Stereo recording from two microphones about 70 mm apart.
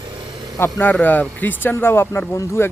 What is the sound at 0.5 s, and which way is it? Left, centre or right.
Speech, left.